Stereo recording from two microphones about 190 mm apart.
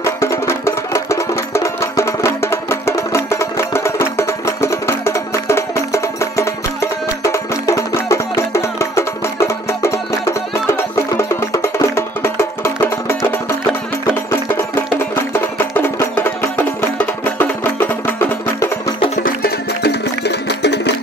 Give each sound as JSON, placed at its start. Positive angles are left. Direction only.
{"t": 0.0, "sound": "music", "side_deg": 15}
{"t": 14.5, "sound": "music", "side_deg": 10}
{"t": 18.9, "sound": "music", "side_deg": 35}
{"t": 19.2, "sound": "music", "side_deg": 55}